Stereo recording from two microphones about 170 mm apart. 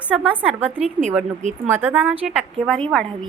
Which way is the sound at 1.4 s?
45° right (ahead or behind).